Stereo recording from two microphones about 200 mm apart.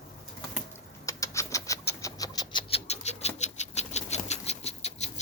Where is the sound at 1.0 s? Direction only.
15° left (ahead or behind).